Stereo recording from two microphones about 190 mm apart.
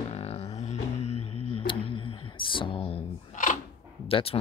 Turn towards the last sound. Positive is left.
turn(degrees=30)  # may be behind; listen again after turning